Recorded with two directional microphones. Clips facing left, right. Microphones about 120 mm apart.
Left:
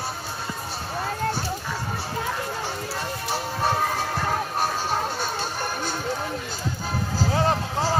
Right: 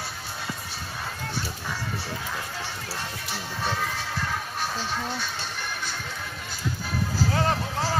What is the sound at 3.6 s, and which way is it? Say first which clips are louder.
Music: left 5 dB; 40° left (ahead or behind).